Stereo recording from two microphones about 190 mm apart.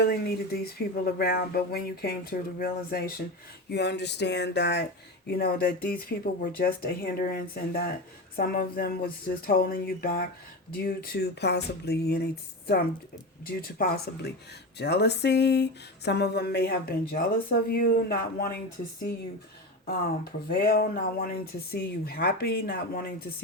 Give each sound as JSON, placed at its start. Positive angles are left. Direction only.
{"t": 0.0, "sound": "speech", "side_deg": 55}
{"t": 3.7, "sound": "speech", "side_deg": 60}
{"t": 20.5, "sound": "speech", "side_deg": 55}